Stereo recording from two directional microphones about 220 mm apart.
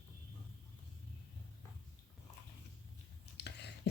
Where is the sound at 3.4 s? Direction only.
50° left (ahead or behind).